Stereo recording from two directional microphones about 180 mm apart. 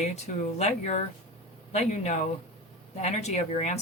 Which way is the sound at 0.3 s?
50° left (ahead or behind).